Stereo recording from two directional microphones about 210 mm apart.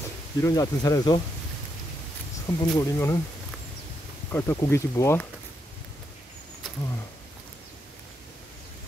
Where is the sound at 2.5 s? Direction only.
15° left (ahead or behind).